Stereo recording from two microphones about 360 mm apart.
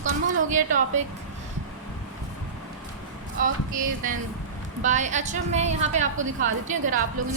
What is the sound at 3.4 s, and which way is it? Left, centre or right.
A woman's voice, right.